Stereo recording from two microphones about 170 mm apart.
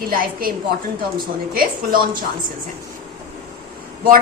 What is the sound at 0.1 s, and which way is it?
Speech, 60° right (ahead or behind).